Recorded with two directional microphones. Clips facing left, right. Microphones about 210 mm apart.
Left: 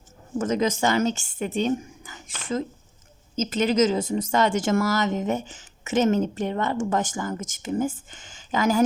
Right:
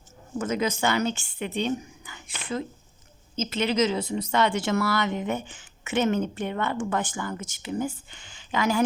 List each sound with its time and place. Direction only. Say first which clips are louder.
0.3 s speech: left 3 dB; 40° left (ahead or behind)